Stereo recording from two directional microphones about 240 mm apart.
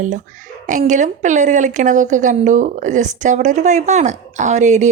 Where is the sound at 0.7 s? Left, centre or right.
Right.